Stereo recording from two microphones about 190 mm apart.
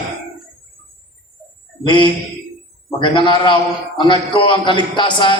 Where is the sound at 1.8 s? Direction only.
25° left (ahead or behind).